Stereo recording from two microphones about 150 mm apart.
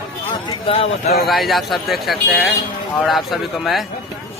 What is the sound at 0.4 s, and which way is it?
Speech, 35° left (ahead or behind).